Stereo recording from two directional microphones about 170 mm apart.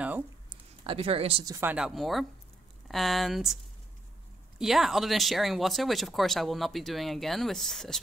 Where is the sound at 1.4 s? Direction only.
15° right (ahead or behind).